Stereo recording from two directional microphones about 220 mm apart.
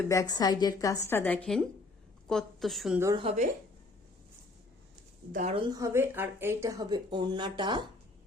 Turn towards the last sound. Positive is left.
turn(degrees=-20)  # may be behind; listen again after turning